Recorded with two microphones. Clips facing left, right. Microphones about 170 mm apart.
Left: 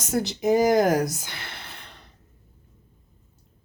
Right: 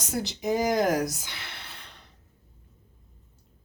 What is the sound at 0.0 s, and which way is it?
Speech, 50° left (ahead or behind).